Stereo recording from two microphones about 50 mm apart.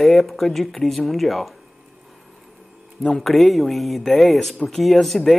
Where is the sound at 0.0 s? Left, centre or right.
Centre.